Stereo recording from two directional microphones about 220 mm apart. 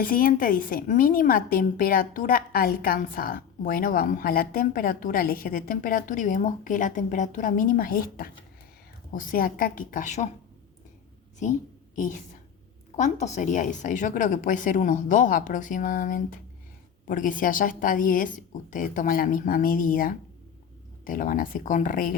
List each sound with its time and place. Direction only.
0.0 s a woman's voice: 40° left (ahead or behind)
13.0 s a woman's voice: 30° left (ahead or behind)